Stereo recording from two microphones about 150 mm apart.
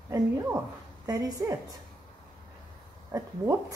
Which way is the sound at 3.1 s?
20° right (ahead or behind).